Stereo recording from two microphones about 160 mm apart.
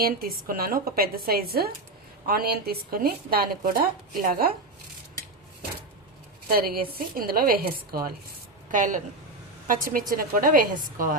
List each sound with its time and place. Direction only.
0.0 s a woman's voice: 65° right (ahead or behind)
6.5 s a woman's voice: 70° right (ahead or behind)
8.7 s a woman's voice: 55° right (ahead or behind)